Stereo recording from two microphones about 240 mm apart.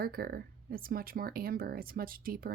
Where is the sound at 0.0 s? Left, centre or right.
Right.